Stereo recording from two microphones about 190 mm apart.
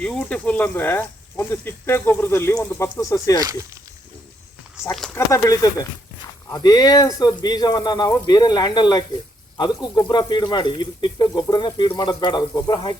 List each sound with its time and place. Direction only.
0.0 s speech: 5° left (ahead or behind)
3.4 s speech: 15° right (ahead or behind)
4.8 s speech: 5° left (ahead or behind)
5.1 s speech: 15° left (ahead or behind)